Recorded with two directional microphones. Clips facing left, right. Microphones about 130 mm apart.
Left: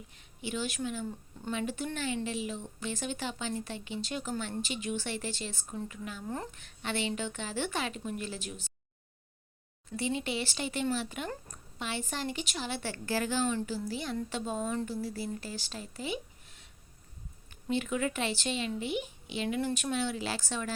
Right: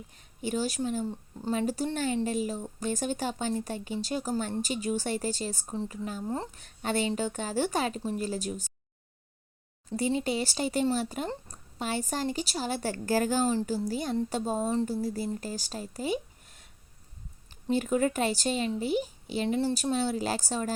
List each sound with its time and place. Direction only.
0.2 s a woman's voice: 40° right (ahead or behind)
9.9 s a woman's voice: 40° right (ahead or behind)